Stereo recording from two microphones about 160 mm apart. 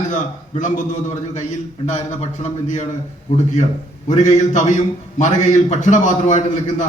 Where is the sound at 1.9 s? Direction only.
45° left (ahead or behind).